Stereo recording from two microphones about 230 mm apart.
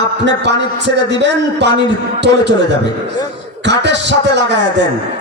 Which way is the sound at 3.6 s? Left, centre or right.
Right.